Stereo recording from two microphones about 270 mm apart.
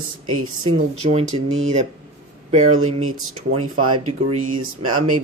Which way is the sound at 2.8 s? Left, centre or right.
Right.